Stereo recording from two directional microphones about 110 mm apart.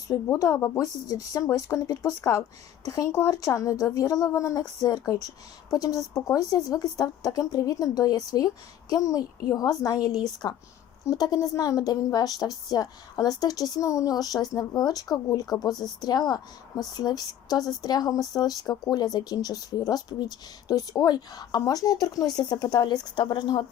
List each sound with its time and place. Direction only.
0.1 s a woman's voice: 30° left (ahead or behind)